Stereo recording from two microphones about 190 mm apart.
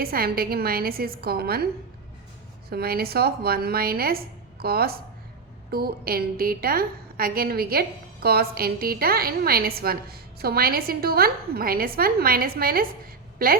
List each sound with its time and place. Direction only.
0.0 s a woman's voice: 50° right (ahead or behind)
2.6 s a woman's voice: 55° right (ahead or behind)